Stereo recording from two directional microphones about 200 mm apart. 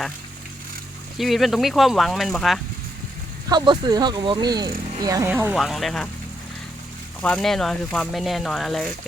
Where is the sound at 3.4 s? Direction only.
20° right (ahead or behind); by 6.1 s centre (ahead or behind).